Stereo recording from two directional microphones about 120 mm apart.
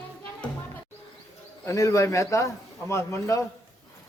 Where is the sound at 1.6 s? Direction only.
25° left (ahead or behind).